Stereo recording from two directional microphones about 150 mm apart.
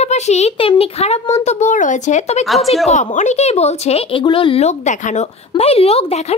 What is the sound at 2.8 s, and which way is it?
A woman's voice, 50° left (ahead or behind).